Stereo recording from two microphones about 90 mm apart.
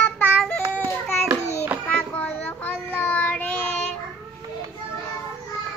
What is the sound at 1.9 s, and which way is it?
Child singing, 15° left (ahead or behind).